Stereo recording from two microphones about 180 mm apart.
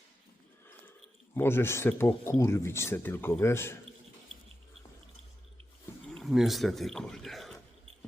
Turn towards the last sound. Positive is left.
turn(degrees=0)  # may be behind; listen again after turning